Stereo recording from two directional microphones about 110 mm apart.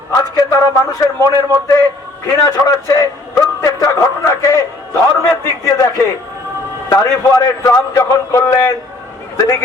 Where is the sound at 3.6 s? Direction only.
30° left (ahead or behind).